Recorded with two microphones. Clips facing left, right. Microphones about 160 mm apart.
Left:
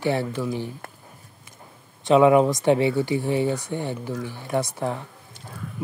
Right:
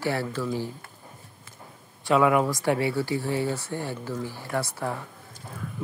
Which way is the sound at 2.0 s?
20° left (ahead or behind).